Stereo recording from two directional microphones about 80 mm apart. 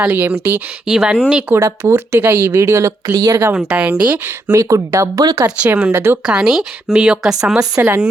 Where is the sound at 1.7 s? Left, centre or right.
Right.